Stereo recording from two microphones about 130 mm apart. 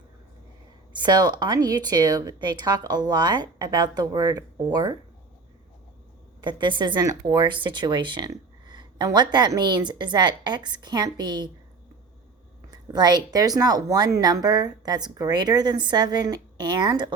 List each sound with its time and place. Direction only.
0.9 s speech: 35° right (ahead or behind)
6.4 s speech: 35° right (ahead or behind)
12.7 s speech: 30° right (ahead or behind)